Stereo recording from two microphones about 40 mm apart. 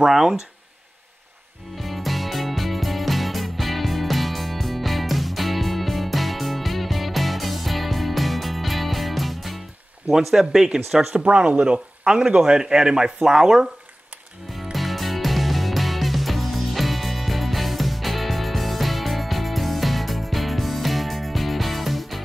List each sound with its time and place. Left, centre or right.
0.0 s a man's voice: centre
1.8 s music: centre
10.0 s a man's voice: centre
11.1 s a man's voice: right; by 13.7 s centre
14.5 s music: centre